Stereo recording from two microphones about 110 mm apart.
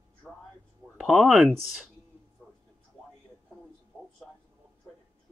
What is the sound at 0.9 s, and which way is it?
Speech, 5° right (ahead or behind).